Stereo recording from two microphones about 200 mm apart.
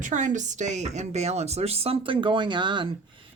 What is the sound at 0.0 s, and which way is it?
Speech, 40° right (ahead or behind).